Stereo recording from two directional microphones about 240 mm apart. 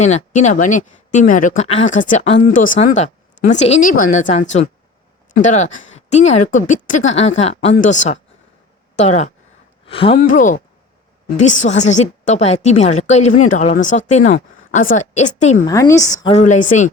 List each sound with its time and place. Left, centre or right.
0.0 s a woman's voice: left
15.6 s a woman's voice: centre
16.3 s speech: left